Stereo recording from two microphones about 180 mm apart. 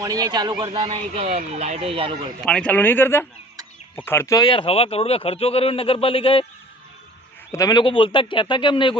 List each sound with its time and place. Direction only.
0.0 s speech: 20° right (ahead or behind)
2.4 s speech: 5° left (ahead or behind); by 6.4 s 30° left (ahead or behind)
7.5 s speech: 20° left (ahead or behind)